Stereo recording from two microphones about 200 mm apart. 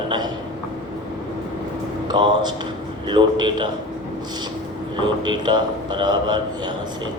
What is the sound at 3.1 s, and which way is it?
Speech, 20° right (ahead or behind).